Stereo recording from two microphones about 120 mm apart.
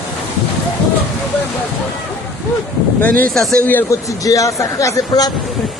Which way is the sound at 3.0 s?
15° left (ahead or behind).